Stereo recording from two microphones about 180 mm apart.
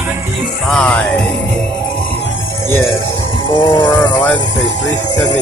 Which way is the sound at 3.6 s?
25° left (ahead or behind).